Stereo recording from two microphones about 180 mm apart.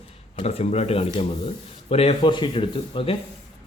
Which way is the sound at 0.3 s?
35° left (ahead or behind).